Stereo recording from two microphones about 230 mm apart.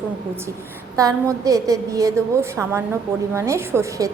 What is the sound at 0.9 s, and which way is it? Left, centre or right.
A woman's voice, centre.